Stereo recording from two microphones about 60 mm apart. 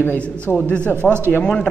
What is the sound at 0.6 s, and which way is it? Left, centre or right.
Speech, left.